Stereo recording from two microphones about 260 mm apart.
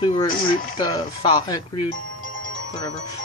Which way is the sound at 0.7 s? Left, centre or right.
Centre.